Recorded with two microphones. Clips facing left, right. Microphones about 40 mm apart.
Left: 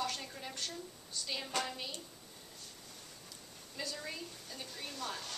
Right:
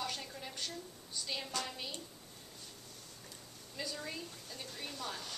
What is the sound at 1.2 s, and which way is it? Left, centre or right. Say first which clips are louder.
Speech: even; centre.